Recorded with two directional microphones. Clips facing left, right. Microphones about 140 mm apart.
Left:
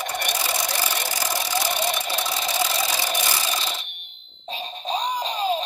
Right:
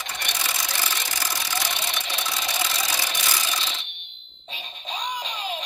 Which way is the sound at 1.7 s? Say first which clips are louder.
Left 6 dB; 45° left (ahead or behind).